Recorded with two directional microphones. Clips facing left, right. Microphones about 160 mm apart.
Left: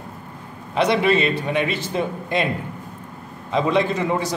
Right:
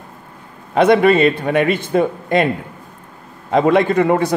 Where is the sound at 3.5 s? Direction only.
55° right (ahead or behind).